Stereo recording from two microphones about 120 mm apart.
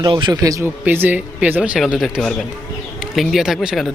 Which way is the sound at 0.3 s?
30° right (ahead or behind).